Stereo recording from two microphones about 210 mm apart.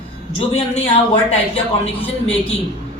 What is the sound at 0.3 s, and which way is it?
Speech, 30° left (ahead or behind).